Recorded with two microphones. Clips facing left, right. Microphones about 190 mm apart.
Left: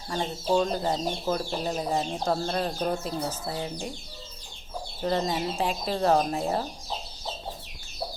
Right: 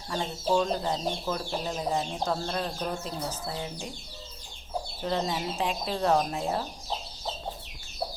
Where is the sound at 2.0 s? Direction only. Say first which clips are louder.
Left 3 dB; 45° left (ahead or behind).